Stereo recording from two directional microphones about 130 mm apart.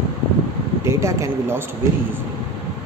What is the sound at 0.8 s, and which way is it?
Speech, 20° right (ahead or behind).